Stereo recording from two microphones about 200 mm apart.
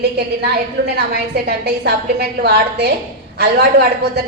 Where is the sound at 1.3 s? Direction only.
55° right (ahead or behind).